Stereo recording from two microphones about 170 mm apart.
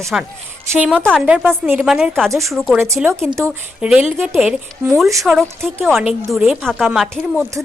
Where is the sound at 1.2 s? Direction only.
5° right (ahead or behind).